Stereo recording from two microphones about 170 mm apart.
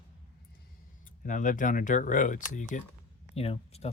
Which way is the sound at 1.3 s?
50° left (ahead or behind).